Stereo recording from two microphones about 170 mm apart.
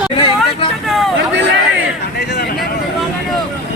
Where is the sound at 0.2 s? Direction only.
30° left (ahead or behind).